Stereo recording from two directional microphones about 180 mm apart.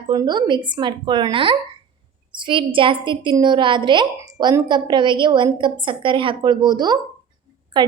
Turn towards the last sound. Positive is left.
turn(degrees=-25)  # may be behind; listen again after turning